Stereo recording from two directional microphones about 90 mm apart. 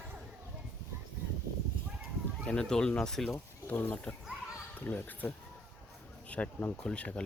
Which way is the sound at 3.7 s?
20° left (ahead or behind).